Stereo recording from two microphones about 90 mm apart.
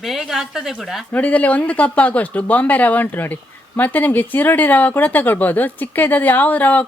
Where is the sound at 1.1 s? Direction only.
15° left (ahead or behind).